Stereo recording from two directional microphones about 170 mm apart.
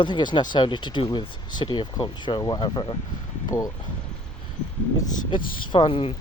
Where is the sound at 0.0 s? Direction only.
25° left (ahead or behind).